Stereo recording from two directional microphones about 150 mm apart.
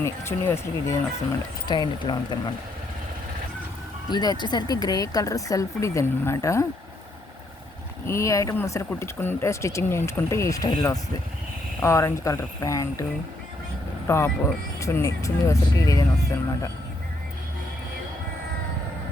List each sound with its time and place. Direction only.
0.0 s speech: 15° left (ahead or behind)
1.6 s speech: 30° left (ahead or behind)
4.1 s speech: 25° left (ahead or behind)
8.0 s speech: 20° left (ahead or behind)
14.1 s speech: 20° left (ahead or behind)